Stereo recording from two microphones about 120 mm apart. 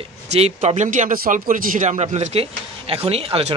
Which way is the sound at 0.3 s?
60° right (ahead or behind).